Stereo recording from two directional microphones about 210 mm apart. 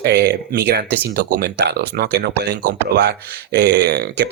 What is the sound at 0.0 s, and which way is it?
Speech, 50° right (ahead or behind).